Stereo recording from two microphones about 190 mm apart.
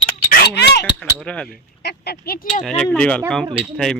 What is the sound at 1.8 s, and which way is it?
Speech, 55° left (ahead or behind).